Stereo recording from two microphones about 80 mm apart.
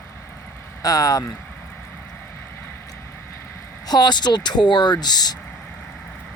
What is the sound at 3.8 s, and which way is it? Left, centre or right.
Speech, left.